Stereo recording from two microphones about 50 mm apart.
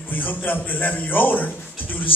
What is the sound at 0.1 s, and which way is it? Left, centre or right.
A man's voice, left.